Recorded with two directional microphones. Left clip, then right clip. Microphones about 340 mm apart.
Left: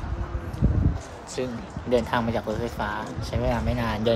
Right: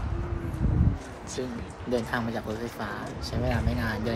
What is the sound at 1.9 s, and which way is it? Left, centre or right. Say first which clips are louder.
Speech: left 6 dB; left.